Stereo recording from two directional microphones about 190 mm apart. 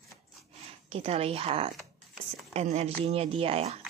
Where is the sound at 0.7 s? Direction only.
30° right (ahead or behind).